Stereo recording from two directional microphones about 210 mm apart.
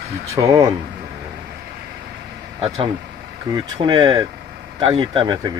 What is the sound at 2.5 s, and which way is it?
Speech, 25° right (ahead or behind).